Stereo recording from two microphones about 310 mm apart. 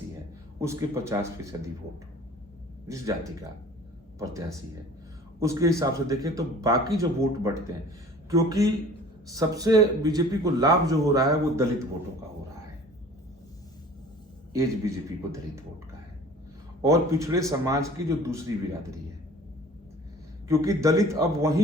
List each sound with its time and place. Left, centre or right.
0.6 s a man's voice: centre
2.8 s a man's voice: centre
14.5 s a man's voice: centre
16.8 s a man's voice: centre
20.5 s a man's voice: centre